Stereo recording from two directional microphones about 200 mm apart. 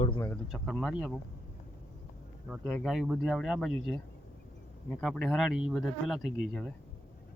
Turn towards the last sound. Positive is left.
turn(degrees=0)  # may be behind; listen again after turning